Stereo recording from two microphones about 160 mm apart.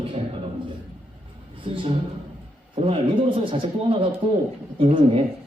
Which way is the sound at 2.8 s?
35° right (ahead or behind).